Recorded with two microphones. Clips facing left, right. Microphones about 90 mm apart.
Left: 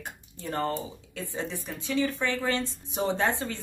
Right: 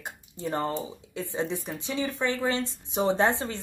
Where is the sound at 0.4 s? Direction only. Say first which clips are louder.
Right 1 dB; 20° right (ahead or behind).